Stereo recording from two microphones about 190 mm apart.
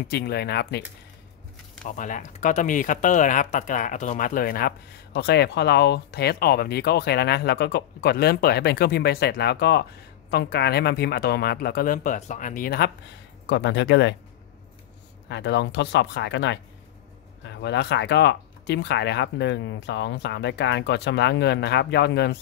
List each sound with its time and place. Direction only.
0.1 s speech: 55° left (ahead or behind)
1.9 s speech: 40° left (ahead or behind)
13.5 s speech: 65° left (ahead or behind)
15.2 s speech: 65° left (ahead or behind)